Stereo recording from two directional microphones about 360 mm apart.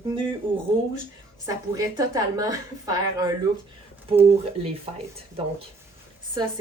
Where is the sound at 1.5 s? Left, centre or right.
Centre.